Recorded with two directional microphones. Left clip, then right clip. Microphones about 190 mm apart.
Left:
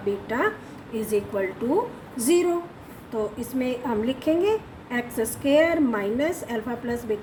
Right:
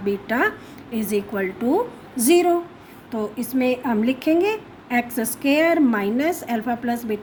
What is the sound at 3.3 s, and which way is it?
A woman's voice, 55° right (ahead or behind).